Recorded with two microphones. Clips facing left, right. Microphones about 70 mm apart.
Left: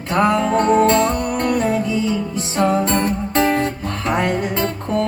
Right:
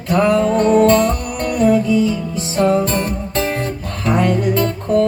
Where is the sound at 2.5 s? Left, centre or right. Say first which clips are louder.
Right 2 dB; left.